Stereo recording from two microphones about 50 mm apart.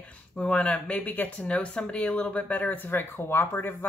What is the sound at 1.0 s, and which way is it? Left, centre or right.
Speech, left.